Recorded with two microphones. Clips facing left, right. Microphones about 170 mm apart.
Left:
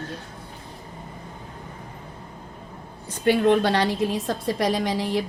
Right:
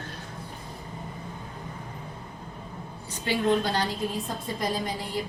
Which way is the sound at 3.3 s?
70° left (ahead or behind).